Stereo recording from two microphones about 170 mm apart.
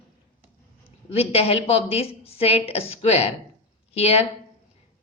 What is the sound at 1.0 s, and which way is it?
A woman's voice, 35° left (ahead or behind).